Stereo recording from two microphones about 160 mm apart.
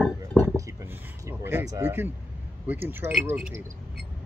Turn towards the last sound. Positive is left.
turn(degrees=-15)  # may be behind; listen again after turning